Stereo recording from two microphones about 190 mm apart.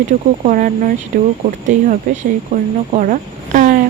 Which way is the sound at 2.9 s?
40° right (ahead or behind).